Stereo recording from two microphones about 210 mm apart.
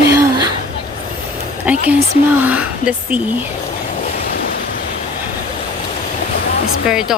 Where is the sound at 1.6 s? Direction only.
5° right (ahead or behind).